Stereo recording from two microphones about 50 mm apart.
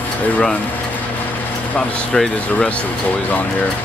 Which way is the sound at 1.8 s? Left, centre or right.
Centre.